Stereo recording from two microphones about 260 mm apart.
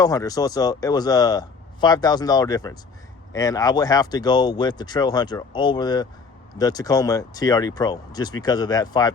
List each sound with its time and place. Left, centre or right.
0.0 s speech: centre